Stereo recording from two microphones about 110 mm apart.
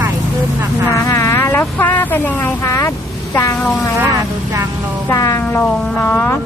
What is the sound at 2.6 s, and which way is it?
Speech, 25° left (ahead or behind).